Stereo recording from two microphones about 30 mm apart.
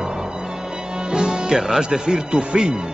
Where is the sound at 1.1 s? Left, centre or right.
Right.